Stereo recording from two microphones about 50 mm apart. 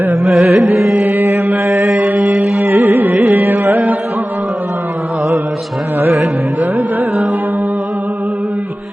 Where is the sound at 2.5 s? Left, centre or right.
Right.